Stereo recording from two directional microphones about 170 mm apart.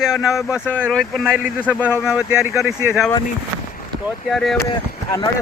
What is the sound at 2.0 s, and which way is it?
Speech, 5° right (ahead or behind).